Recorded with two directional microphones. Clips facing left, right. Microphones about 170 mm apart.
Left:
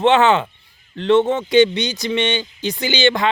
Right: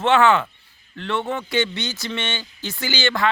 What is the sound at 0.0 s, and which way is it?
Speech, 20° left (ahead or behind).